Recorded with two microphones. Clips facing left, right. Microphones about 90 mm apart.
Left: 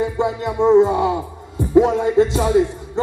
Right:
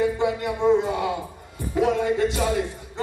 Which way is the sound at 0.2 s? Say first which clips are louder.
Left 4 dB; 30° left (ahead or behind).